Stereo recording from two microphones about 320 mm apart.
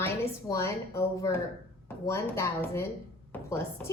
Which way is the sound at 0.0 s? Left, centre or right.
Centre.